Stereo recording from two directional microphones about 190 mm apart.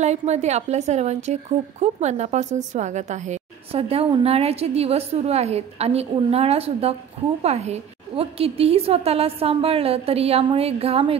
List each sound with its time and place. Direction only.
0.0 s a woman's voice: 35° right (ahead or behind)